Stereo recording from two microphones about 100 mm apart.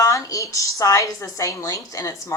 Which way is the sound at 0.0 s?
30° left (ahead or behind).